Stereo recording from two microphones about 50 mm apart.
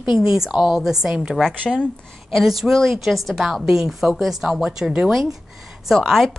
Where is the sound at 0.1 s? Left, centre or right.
Centre.